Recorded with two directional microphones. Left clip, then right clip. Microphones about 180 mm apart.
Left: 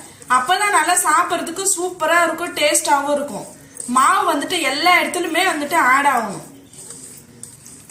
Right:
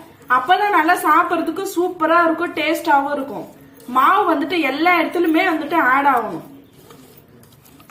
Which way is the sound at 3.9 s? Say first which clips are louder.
Right 1 dB; 25° right (ahead or behind).